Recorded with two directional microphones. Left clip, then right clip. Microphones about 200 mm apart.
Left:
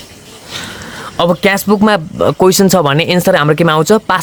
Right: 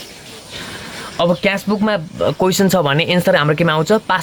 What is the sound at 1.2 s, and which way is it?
Speech, 35° left (ahead or behind).